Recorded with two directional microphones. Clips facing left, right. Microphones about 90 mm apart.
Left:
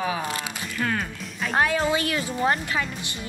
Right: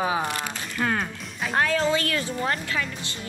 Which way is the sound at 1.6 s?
20° left (ahead or behind).